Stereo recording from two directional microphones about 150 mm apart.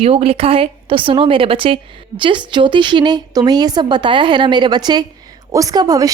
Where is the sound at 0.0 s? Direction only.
40° right (ahead or behind).